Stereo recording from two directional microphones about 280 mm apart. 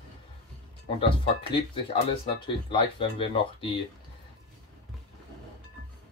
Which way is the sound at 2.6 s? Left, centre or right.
Centre.